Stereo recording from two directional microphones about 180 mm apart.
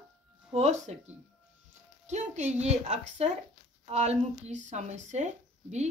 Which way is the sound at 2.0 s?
40° right (ahead or behind).